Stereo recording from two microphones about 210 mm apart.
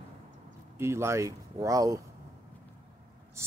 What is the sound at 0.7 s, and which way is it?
Speech, 10° right (ahead or behind).